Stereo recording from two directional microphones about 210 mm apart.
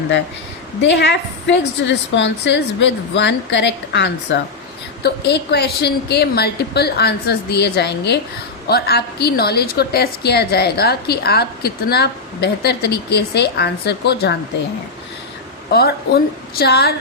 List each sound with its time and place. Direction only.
0.8 s a woman's voice: 55° left (ahead or behind)
15.7 s a woman's voice: 50° left (ahead or behind)